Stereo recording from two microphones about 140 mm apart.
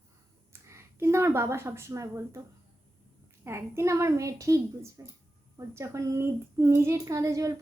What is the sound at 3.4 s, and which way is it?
A child's voice, 20° right (ahead or behind).